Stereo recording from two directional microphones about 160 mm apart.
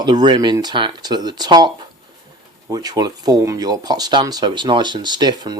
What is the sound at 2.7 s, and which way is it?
Speech, 25° right (ahead or behind).